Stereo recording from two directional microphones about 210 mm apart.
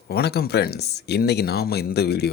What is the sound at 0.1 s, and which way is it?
Speech, 50° left (ahead or behind).